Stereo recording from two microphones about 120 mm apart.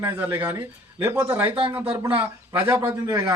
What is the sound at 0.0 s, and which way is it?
Speech, 15° right (ahead or behind).